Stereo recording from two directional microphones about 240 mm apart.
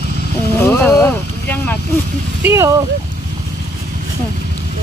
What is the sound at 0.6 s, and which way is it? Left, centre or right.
Vehicle, centre.